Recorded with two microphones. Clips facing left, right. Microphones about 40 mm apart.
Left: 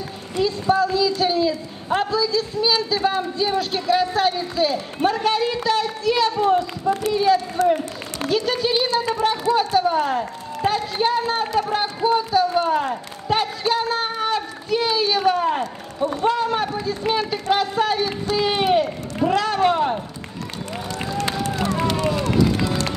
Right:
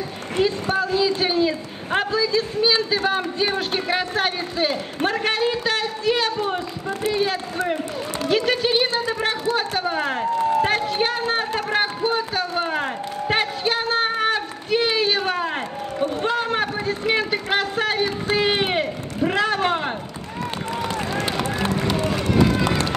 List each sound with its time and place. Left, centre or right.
0.4 s a woman's voice: right
21.8 s run: right